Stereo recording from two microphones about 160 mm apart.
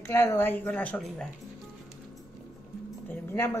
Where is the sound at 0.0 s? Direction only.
15° left (ahead or behind).